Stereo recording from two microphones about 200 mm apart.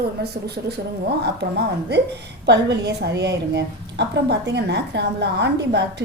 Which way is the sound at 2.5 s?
55° right (ahead or behind).